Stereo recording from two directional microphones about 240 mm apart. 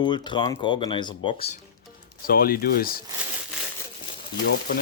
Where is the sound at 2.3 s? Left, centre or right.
Left.